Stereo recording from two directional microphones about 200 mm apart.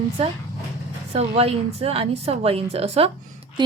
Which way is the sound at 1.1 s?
30° right (ahead or behind).